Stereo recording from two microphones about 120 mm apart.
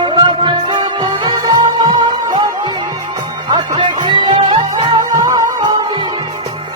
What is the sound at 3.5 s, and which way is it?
Music, 40° right (ahead or behind).